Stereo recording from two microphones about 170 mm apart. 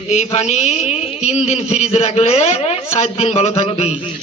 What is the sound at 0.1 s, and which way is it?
A man's voice, 40° left (ahead or behind).